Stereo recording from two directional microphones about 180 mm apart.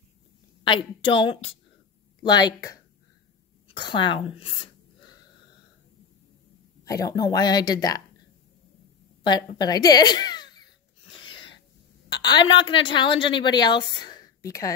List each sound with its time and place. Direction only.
0.7 s a woman's voice: 25° left (ahead or behind)
6.8 s a woman's voice: 20° left (ahead or behind)
9.2 s a woman's voice: 25° left (ahead or behind)
11.1 s a sound: 25° left (ahead or behind)
12.1 s a woman's voice: 25° left (ahead or behind)